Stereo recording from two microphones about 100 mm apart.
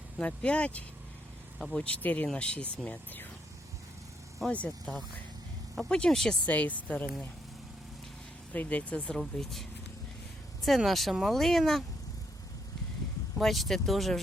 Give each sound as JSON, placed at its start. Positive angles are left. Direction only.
{"t": 0.2, "sound": "speech", "side_deg": 10}
{"t": 4.4, "sound": "speech", "side_deg": 10}
{"t": 5.9, "sound": "speech", "side_deg": 5}
{"t": 6.5, "sound": "speech", "side_deg": 15}
{"t": 8.5, "sound": "speech", "side_deg": 15}
{"t": 9.1, "sound": "speech", "side_deg": 5}
{"t": 13.4, "sound": "speech", "side_deg": 0}